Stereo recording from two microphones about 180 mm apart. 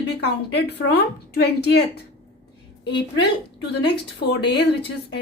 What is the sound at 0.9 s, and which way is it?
Speech, 65° left (ahead or behind).